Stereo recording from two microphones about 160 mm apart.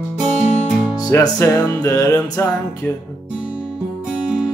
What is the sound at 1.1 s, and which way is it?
Music, 20° left (ahead or behind).